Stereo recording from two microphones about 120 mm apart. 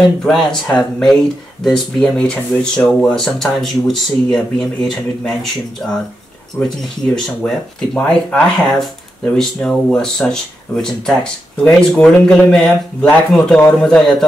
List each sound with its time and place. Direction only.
0.2 s speech: 5° left (ahead or behind)
3.3 s speech: centre (ahead or behind)
7.2 s speech: 5° left (ahead or behind)